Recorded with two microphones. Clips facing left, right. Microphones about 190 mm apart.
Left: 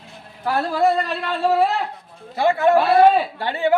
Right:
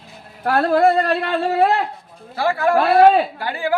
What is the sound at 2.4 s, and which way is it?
Speech, 20° left (ahead or behind).